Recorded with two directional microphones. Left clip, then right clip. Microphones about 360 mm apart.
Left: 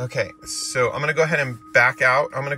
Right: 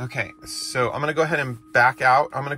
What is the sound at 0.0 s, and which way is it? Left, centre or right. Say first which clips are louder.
Speech: left 3 dB; centre.